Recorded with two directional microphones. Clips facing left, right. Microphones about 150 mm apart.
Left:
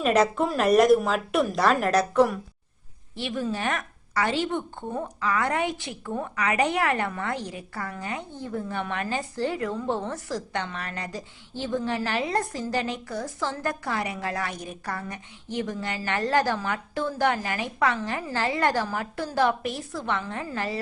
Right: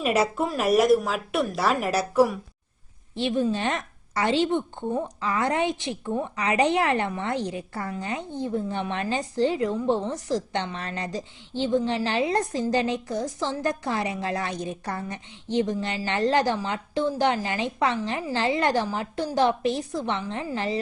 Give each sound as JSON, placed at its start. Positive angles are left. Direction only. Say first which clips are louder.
{"t": 0.0, "sound": "a woman's voice", "louder": "left 2 dB", "side_deg": -10}
{"t": 3.2, "sound": "a woman's voice", "louder": "right 5 dB", "side_deg": -25}